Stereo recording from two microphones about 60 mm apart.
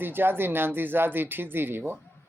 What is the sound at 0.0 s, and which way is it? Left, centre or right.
Speech, right.